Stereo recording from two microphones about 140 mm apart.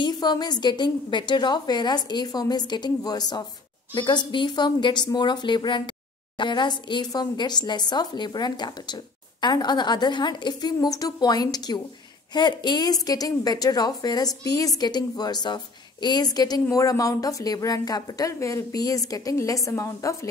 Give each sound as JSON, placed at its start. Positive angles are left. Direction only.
{"t": 0.0, "sound": "a woman's voice", "side_deg": 30}